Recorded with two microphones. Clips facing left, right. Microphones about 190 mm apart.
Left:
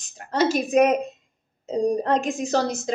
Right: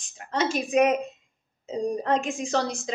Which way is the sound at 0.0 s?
40° left (ahead or behind).